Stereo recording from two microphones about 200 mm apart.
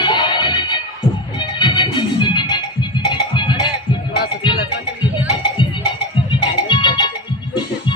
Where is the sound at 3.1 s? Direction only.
25° left (ahead or behind).